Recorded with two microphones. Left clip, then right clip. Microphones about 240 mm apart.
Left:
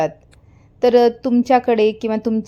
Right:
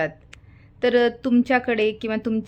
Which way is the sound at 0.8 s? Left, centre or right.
Centre.